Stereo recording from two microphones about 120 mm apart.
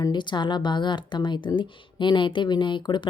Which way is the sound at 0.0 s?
40° left (ahead or behind).